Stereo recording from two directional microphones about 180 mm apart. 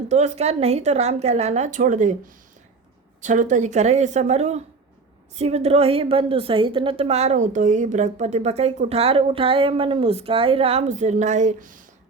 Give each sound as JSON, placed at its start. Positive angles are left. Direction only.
{"t": 0.1, "sound": "a woman's voice", "side_deg": -40}